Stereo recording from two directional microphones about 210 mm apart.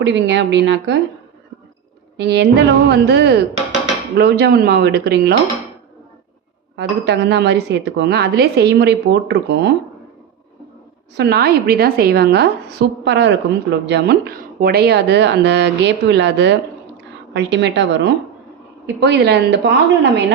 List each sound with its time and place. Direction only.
0.0 s speech: 55° right (ahead or behind)
2.1 s a woman's voice: 55° right (ahead or behind)
6.7 s a woman's voice: 55° right (ahead or behind)
11.2 s a woman's voice: 50° right (ahead or behind)